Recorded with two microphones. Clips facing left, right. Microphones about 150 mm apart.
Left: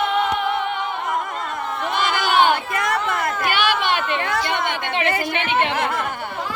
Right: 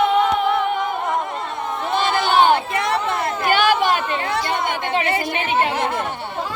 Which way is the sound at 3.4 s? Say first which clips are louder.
Right 6 dB; 45° right (ahead or behind).